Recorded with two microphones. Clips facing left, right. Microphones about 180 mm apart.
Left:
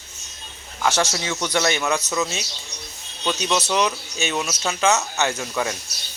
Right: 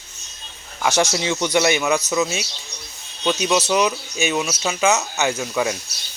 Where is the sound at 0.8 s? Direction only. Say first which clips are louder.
Right 2 dB; 10° right (ahead or behind).